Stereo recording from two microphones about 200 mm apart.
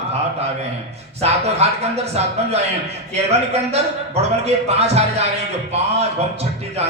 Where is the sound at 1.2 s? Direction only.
30° right (ahead or behind).